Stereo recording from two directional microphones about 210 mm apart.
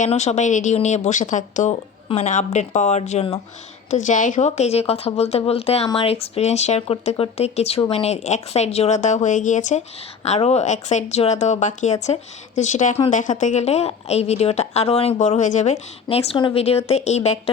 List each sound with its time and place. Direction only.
0.0 s a woman's voice: 35° left (ahead or behind)